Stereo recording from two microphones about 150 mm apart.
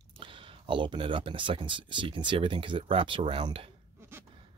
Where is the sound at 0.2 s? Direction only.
35° right (ahead or behind).